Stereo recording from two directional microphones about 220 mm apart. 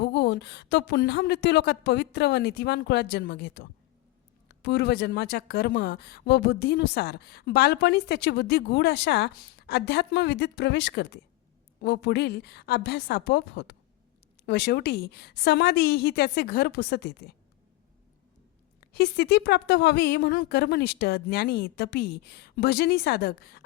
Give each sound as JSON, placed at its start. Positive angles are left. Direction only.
{"t": 0.0, "sound": "speech", "side_deg": 50}
{"t": 18.8, "sound": "speech", "side_deg": 50}